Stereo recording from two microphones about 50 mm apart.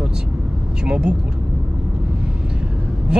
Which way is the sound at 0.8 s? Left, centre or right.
Centre.